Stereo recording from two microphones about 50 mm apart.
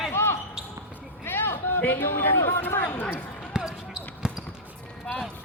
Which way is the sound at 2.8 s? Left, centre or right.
Left.